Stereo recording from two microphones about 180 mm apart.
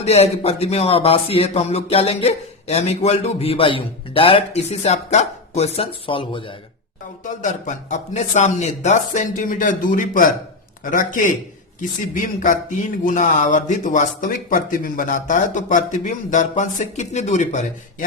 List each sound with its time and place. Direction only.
0.0 s speech: 35° left (ahead or behind)
7.3 s speech: 45° left (ahead or behind)